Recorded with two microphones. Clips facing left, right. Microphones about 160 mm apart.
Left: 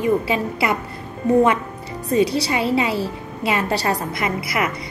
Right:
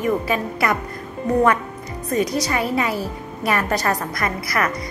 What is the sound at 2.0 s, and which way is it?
A woman's voice, 30° left (ahead or behind).